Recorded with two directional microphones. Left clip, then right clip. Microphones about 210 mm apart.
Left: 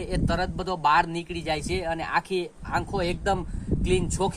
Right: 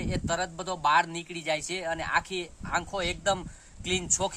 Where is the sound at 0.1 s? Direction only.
15° right (ahead or behind).